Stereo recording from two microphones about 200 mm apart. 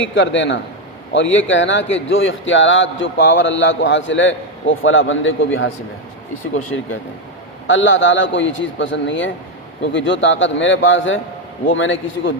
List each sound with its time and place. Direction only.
0.1 s a man's voice: 65° left (ahead or behind)
6.7 s a man's voice: 80° left